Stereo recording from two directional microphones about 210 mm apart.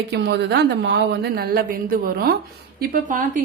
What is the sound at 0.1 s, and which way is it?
A woman's voice, 55° right (ahead or behind).